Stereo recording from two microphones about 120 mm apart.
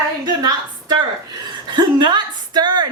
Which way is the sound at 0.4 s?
35° right (ahead or behind).